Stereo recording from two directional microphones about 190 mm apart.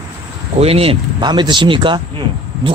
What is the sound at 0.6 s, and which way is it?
Speech, 30° right (ahead or behind).